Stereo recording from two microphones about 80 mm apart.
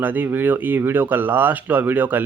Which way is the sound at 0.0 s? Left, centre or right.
Right.